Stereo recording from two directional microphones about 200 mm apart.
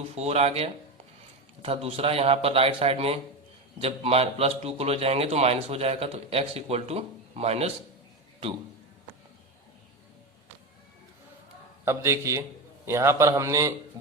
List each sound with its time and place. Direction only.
0.2 s a man's voice: 30° right (ahead or behind)
11.9 s a man's voice: 15° right (ahead or behind)